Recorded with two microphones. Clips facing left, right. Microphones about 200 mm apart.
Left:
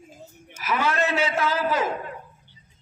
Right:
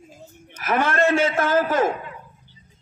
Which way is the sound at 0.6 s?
50° right (ahead or behind).